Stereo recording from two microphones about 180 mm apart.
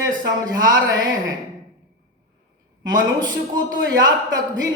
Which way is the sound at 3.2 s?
25° right (ahead or behind).